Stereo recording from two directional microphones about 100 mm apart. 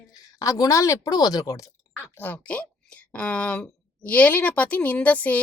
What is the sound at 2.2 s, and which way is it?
Speech, 15° left (ahead or behind).